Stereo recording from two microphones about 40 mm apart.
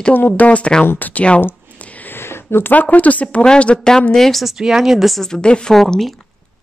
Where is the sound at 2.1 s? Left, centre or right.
Left.